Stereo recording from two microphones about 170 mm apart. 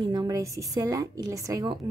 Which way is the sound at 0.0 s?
25° right (ahead or behind).